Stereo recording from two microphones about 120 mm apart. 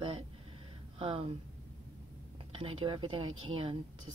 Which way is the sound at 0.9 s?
50° right (ahead or behind).